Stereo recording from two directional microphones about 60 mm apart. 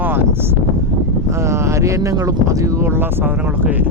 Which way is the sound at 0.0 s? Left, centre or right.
Right.